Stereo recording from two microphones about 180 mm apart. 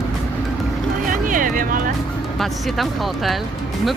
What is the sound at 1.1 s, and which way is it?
Speech, 50° right (ahead or behind).